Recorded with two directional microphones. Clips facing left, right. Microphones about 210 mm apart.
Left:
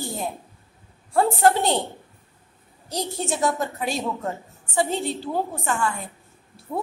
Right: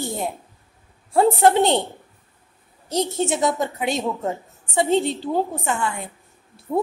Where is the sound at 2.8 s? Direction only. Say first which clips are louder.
Right 6 dB; 20° right (ahead or behind).